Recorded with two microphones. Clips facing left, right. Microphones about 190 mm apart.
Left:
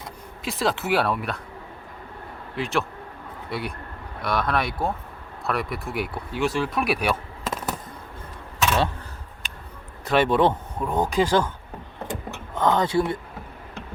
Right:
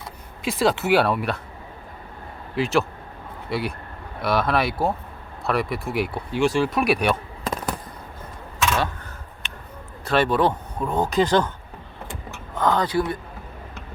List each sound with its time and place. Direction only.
0.4 s speech: centre (ahead or behind)
2.6 s speech: centre (ahead or behind)
10.0 s speech: 20° left (ahead or behind)
12.5 s speech: 25° left (ahead or behind)